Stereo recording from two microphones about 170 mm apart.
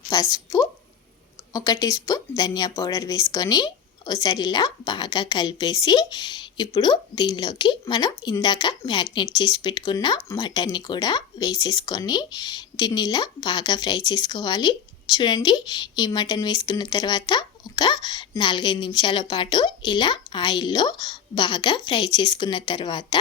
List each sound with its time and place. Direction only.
0.1 s a woman's voice: 20° left (ahead or behind)